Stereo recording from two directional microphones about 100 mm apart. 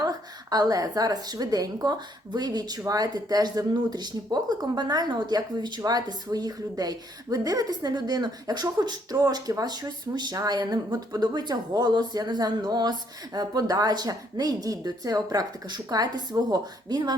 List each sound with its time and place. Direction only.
0.0 s a woman's voice: 40° right (ahead or behind)